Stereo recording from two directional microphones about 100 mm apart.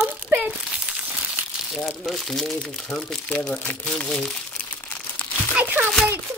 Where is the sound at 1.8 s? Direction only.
Centre (ahead or behind).